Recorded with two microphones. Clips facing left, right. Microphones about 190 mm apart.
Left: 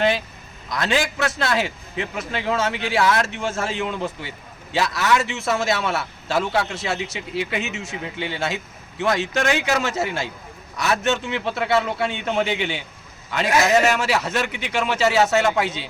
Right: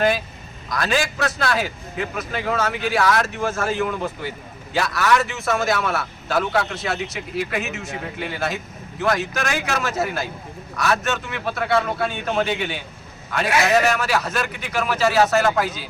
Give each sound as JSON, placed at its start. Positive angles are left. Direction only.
{"t": 0.7, "sound": "a man's voice", "side_deg": 25}